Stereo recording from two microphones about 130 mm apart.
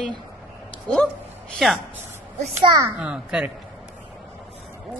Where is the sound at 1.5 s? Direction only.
Centre (ahead or behind).